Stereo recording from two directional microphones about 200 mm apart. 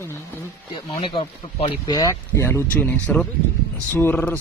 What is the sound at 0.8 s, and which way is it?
Speech, 25° left (ahead or behind).